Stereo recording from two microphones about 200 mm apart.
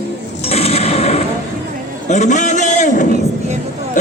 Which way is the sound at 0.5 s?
30° left (ahead or behind).